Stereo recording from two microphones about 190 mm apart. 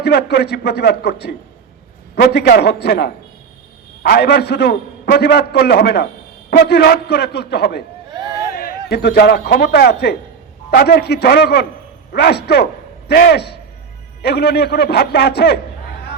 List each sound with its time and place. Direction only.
0.0 s a man's voice: 60° left (ahead or behind)